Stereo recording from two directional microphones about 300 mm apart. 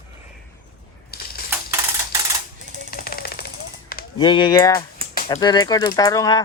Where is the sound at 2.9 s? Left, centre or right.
Left.